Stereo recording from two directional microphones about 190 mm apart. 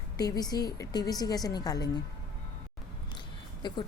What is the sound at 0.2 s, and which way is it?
A woman's voice, 20° left (ahead or behind).